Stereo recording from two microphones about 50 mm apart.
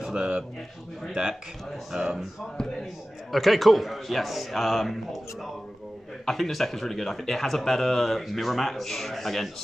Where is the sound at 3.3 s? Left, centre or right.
Centre.